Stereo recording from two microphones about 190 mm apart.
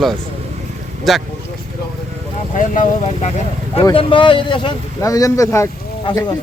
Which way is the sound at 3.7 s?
25° left (ahead or behind).